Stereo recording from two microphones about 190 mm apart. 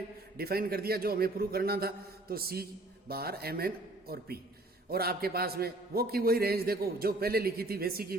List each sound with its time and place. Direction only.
0.3 s a man's voice: 55° right (ahead or behind)
4.9 s a man's voice: 55° right (ahead or behind)